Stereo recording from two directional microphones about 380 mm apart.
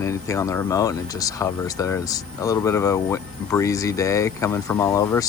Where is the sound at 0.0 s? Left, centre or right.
Centre.